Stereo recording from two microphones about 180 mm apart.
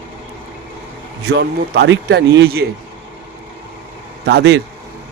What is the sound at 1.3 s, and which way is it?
A man's voice, 65° right (ahead or behind).